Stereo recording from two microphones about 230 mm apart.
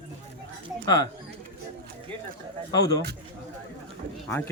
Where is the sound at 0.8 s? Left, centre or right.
Centre.